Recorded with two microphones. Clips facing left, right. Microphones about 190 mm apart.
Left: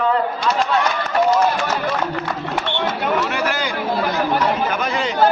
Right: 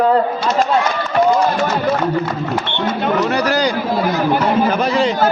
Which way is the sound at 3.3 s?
40° right (ahead or behind).